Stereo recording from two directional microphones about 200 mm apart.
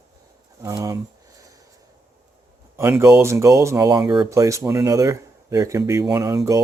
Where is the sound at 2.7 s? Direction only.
10° right (ahead or behind).